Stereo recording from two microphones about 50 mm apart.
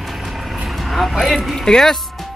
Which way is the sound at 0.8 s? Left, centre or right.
Centre.